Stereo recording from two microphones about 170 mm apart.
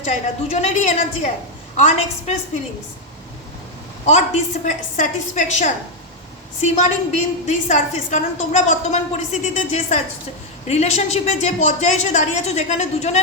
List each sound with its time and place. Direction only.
0.0 s a woman's voice: 45° left (ahead or behind)
4.6 s a woman's voice: 50° left (ahead or behind)